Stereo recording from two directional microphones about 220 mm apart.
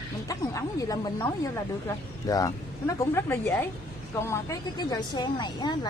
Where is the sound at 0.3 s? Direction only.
15° left (ahead or behind).